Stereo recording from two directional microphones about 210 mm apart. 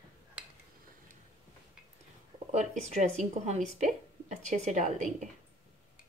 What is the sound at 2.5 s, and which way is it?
Speech, 30° right (ahead or behind).